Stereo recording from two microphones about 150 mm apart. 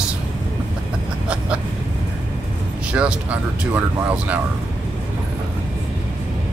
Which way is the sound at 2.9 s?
10° right (ahead or behind).